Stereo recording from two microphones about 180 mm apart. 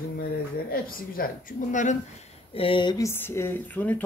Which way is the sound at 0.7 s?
55° left (ahead or behind).